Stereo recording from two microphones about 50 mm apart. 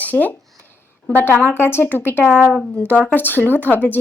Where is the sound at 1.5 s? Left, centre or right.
Left.